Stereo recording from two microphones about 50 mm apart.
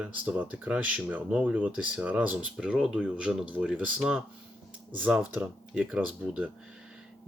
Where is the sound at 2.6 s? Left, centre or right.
Centre.